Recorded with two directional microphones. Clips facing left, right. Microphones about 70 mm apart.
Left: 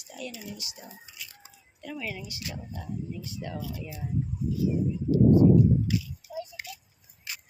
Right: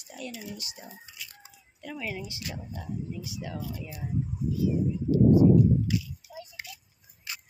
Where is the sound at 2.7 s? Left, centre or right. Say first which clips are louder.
Even; centre.